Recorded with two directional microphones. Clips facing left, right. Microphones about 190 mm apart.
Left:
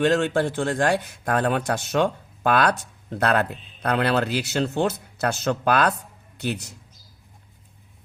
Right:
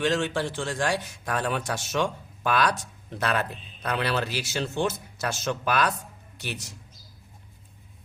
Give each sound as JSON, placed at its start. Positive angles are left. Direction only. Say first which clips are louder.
{"t": 0.0, "sound": "speech", "louder": "left 5 dB", "side_deg": 55}